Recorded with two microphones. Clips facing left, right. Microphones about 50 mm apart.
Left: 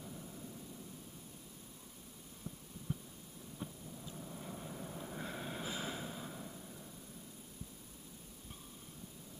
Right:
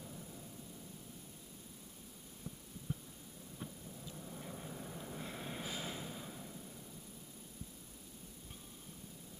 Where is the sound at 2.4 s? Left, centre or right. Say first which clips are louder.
Left 1 dB; left.